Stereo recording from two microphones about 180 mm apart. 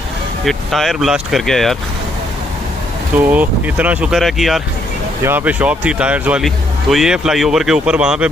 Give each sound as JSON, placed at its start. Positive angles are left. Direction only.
{"t": 0.5, "sound": "speech", "side_deg": 0}
{"t": 3.3, "sound": "speech", "side_deg": -10}